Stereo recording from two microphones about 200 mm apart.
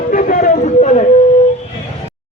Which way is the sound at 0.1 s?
45° left (ahead or behind).